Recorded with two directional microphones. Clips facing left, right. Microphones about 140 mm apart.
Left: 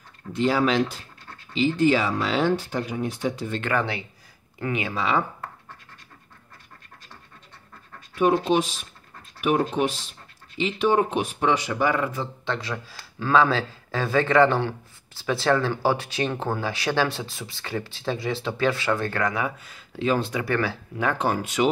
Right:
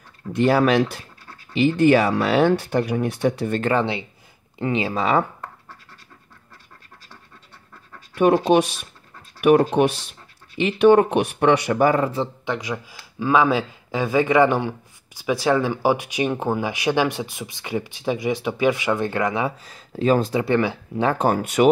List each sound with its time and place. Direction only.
0.3 s speech: 60° right (ahead or behind)
3.6 s speech: 25° right (ahead or behind)
4.9 s speech: 45° right (ahead or behind)
8.1 s speech: 70° right (ahead or behind)
11.9 s speech: 30° right (ahead or behind)
12.4 s speech: 15° right (ahead or behind)
19.6 s speech: 40° right (ahead or behind)
20.3 s speech: 20° right (ahead or behind)
21.1 s speech: 45° right (ahead or behind)